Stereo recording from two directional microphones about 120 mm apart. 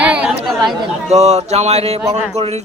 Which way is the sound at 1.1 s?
70° right (ahead or behind).